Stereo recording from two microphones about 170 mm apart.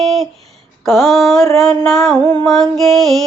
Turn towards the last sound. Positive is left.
turn(degrees=0)  # may be behind; listen again after turning